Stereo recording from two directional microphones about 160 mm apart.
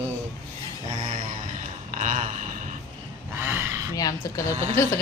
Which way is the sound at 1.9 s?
50° right (ahead or behind).